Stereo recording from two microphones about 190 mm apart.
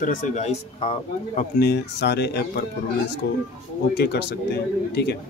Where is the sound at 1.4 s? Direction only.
55° left (ahead or behind).